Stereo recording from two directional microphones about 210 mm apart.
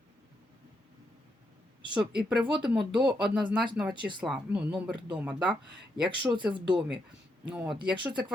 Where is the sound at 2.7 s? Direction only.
Centre (ahead or behind).